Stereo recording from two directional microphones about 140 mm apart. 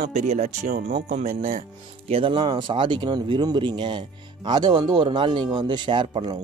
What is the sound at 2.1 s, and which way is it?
Speech, 40° right (ahead or behind).